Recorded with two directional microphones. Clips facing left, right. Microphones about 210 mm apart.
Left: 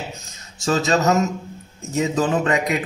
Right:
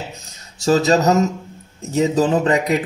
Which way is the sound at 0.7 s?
35° right (ahead or behind).